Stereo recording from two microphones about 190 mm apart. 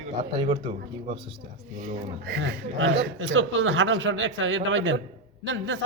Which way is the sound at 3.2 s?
80° right.